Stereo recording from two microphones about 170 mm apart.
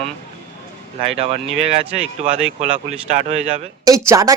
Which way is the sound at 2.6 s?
40° right (ahead or behind).